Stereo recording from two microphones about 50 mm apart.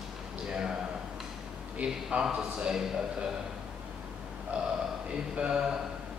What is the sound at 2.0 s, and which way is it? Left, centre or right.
Speech, centre.